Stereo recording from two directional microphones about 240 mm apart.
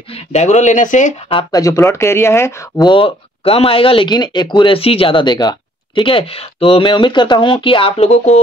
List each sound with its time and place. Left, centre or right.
0.1 s speech: left
1.5 s speech: centre